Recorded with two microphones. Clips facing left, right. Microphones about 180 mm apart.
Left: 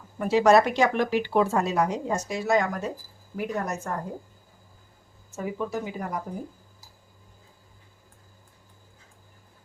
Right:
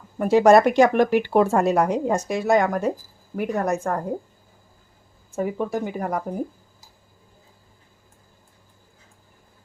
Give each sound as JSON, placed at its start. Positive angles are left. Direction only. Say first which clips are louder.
{"t": 0.2, "sound": "speech", "louder": "right 4 dB", "side_deg": -50}
{"t": 5.3, "sound": "speech", "louder": "right 5 dB", "side_deg": -55}